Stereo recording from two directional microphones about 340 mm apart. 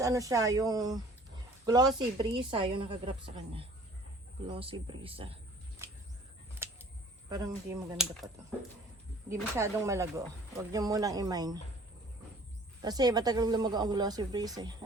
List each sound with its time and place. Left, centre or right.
0.0 s speech: centre
6.6 s a sound: centre
7.3 s speech: centre
9.3 s speech: centre
12.8 s speech: centre